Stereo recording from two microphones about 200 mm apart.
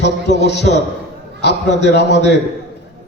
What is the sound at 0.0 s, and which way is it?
A man's voice, 60° left (ahead or behind).